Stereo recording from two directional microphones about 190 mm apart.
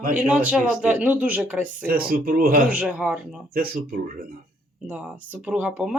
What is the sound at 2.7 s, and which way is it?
Speech, 5° right (ahead or behind).